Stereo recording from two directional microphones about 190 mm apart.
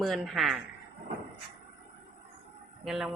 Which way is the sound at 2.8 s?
Centre (ahead or behind).